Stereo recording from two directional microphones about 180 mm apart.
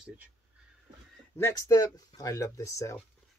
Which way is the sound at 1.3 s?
15° left (ahead or behind).